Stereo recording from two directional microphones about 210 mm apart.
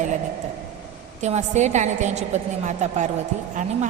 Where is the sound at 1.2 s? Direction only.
35° right (ahead or behind).